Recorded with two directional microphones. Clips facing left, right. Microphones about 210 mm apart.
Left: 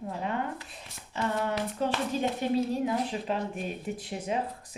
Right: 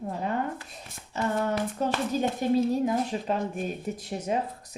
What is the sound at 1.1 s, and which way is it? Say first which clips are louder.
Speech: right 3 dB; 45° right (ahead or behind).